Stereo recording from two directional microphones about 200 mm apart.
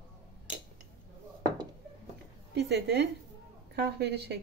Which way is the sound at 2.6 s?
55° right (ahead or behind).